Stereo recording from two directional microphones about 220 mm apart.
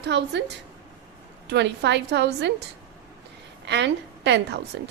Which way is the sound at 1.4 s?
50° right (ahead or behind).